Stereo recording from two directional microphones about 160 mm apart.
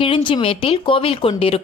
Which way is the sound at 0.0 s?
30° left (ahead or behind).